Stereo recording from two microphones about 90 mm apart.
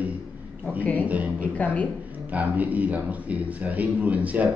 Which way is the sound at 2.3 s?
20° right (ahead or behind).